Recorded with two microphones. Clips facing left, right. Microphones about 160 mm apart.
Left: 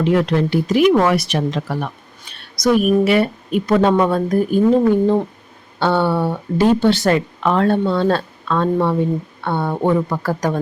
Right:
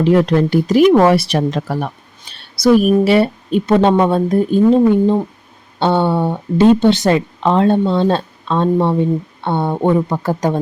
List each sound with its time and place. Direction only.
0.0 s speech: 35° right (ahead or behind)
2.3 s speech: 30° right (ahead or behind)